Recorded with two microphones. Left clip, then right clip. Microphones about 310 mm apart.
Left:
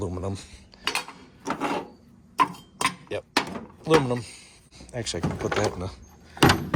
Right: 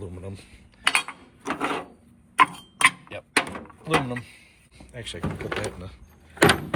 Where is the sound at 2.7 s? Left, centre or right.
Centre.